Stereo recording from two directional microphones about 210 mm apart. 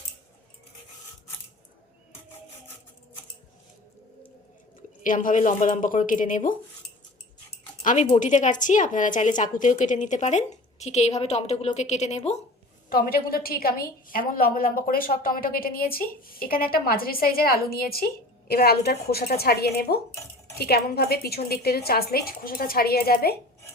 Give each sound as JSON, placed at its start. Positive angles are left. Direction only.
{"t": 5.0, "sound": "a woman's voice", "side_deg": 40}
{"t": 7.8, "sound": "a woman's voice", "side_deg": 35}
{"t": 12.9, "sound": "a woman's voice", "side_deg": 45}